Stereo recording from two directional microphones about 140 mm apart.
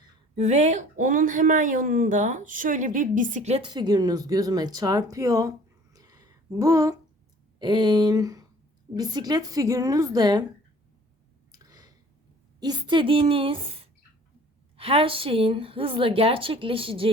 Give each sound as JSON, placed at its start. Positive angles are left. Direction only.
{"t": 0.3, "sound": "a woman's voice", "side_deg": -55}
{"t": 3.6, "sound": "a woman's voice", "side_deg": -30}
{"t": 11.5, "sound": "a sound", "side_deg": -25}
{"t": 12.5, "sound": "a woman's voice", "side_deg": -30}